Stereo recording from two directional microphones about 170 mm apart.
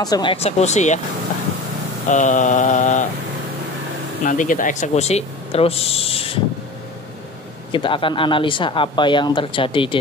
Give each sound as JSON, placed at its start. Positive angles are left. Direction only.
{"t": 0.0, "sound": "speech", "side_deg": 25}
{"t": 2.0, "sound": "mantra", "side_deg": 45}
{"t": 4.2, "sound": "speech", "side_deg": 50}
{"t": 7.7, "sound": "speech", "side_deg": 30}